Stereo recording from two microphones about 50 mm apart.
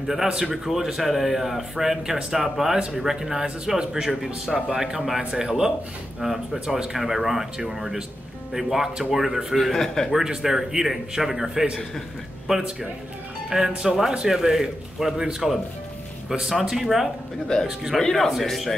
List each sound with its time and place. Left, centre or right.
0.8 s a man's voice: centre
9.6 s a man's voice: centre
10.1 s a man's voice: centre
17.5 s a man's voice: centre